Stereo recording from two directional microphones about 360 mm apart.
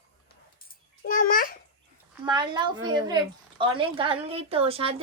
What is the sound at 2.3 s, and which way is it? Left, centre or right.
A woman's voice, centre.